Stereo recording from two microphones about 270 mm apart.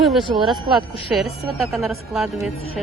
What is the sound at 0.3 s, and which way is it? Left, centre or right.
Speech, centre.